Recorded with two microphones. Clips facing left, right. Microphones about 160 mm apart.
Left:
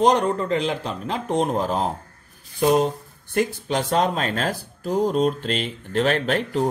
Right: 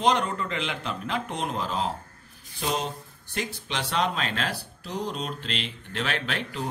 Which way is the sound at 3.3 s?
45° left (ahead or behind).